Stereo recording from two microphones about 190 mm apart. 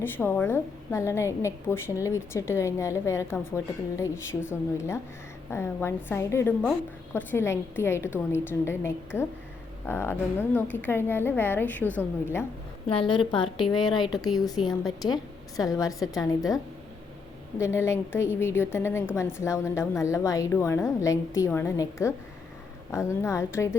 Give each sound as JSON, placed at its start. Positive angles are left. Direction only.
{"t": 0.0, "sound": "a woman's voice", "side_deg": 10}
{"t": 5.5, "sound": "a woman's voice", "side_deg": 15}
{"t": 12.9, "sound": "a woman's voice", "side_deg": 25}
{"t": 17.6, "sound": "a woman's voice", "side_deg": 15}